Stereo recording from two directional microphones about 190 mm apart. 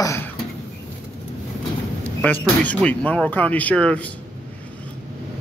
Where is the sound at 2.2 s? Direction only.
5° left (ahead or behind).